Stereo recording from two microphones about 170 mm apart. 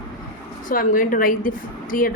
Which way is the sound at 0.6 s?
55° left (ahead or behind).